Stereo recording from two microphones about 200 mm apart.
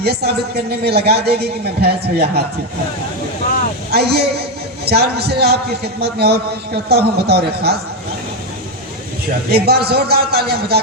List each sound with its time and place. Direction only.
0.0 s a man's voice: 55° right (ahead or behind)
3.9 s a man's voice: 55° right (ahead or behind)
9.6 s a man's voice: 50° right (ahead or behind)